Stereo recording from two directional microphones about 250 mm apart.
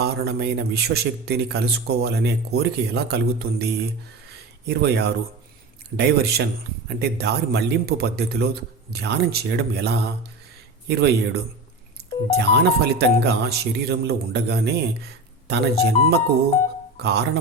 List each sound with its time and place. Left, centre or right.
0.0 s a man's voice: right
12.4 s a man's voice: right